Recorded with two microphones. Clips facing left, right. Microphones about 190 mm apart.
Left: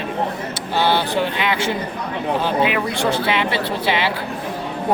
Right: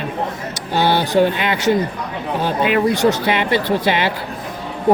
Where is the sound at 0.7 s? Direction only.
45° right (ahead or behind).